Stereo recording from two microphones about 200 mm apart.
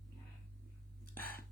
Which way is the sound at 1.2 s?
45° left (ahead or behind).